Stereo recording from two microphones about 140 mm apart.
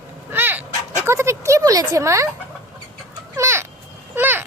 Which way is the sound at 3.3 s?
20° right (ahead or behind).